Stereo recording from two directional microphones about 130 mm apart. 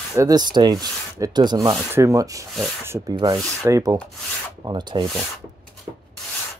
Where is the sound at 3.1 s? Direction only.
30° right (ahead or behind).